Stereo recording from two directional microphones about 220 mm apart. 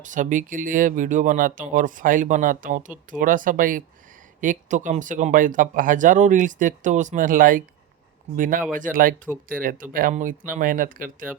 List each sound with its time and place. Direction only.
0.0 s speech: 35° right (ahead or behind)